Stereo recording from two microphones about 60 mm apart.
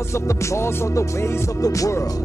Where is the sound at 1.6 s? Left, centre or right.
Left.